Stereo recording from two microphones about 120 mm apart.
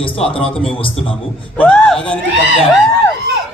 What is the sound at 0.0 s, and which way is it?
A man's voice, 50° left (ahead or behind).